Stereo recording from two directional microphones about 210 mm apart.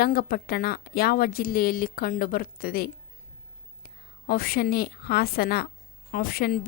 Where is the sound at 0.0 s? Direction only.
45° left (ahead or behind).